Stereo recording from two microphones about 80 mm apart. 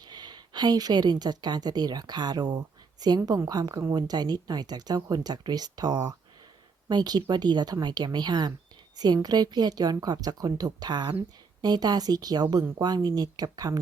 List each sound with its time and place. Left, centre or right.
0.0 s a woman's voice: right